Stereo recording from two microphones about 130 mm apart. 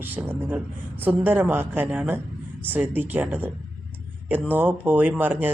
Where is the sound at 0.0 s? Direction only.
15° right (ahead or behind).